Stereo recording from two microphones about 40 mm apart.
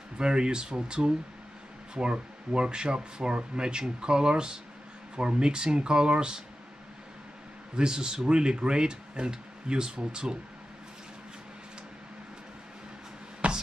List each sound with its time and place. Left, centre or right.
0.2 s speech: right
7.7 s speech: centre
13.4 s a sound: right